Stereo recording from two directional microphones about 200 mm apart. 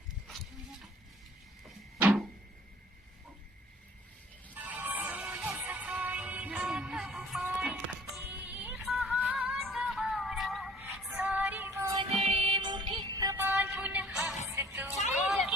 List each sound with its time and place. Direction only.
2.0 s a sound: 5° right (ahead or behind)
4.5 s music: 10° right (ahead or behind)
12.2 s music: 30° right (ahead or behind); by 14.9 s 10° right (ahead or behind)
15.1 s vehicle: centre (ahead or behind)